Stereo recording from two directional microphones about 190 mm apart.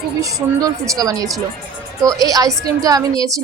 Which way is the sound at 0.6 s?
20° right (ahead or behind).